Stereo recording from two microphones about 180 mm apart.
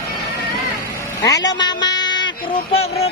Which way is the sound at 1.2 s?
20° left (ahead or behind).